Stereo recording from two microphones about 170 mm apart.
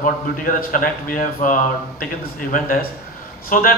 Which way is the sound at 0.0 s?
55° left (ahead or behind).